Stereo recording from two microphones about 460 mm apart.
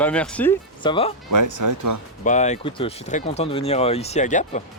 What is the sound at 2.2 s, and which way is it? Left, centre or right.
Speech, centre.